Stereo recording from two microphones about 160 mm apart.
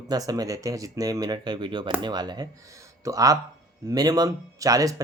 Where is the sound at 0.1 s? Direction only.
25° right (ahead or behind).